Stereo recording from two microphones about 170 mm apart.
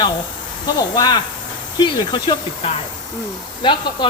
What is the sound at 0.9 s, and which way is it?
Speech, 25° left (ahead or behind).